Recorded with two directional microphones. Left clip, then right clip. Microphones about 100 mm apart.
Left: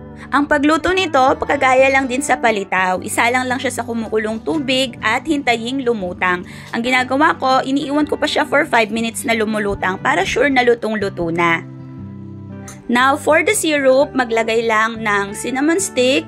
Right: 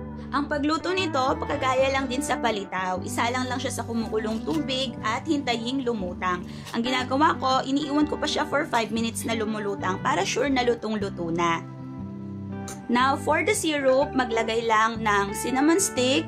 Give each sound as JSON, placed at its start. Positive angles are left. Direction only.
{"t": 0.3, "sound": "a woman's voice", "side_deg": 90}
{"t": 2.7, "sound": "a woman's voice", "side_deg": 90}
{"t": 3.2, "sound": "speech", "side_deg": 50}
{"t": 4.6, "sound": "speech", "side_deg": 65}
{"t": 6.1, "sound": "speech", "side_deg": 70}
{"t": 6.7, "sound": "a woman's voice", "side_deg": 45}
{"t": 10.1, "sound": "speech", "side_deg": 40}
{"t": 12.9, "sound": "speech", "side_deg": 60}